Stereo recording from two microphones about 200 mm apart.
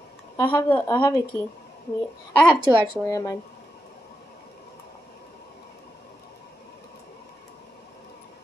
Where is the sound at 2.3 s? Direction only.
5° left (ahead or behind).